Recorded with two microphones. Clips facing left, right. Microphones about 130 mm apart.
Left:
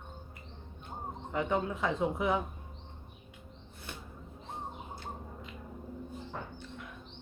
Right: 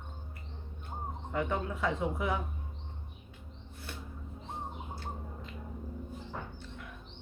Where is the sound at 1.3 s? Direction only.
20° left (ahead or behind).